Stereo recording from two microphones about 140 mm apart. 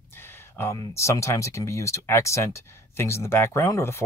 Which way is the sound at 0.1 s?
15° left (ahead or behind).